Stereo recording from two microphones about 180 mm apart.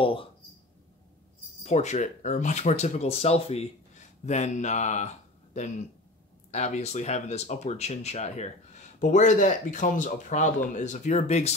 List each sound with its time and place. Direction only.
0.0 s speech: 30° left (ahead or behind)
1.6 s speech: 40° left (ahead or behind)